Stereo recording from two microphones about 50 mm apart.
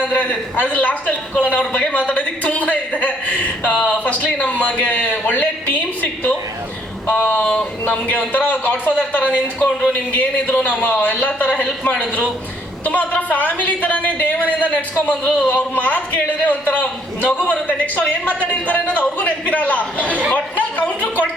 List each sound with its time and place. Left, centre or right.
0.0 s a man's voice: left
7.4 s a man's voice: centre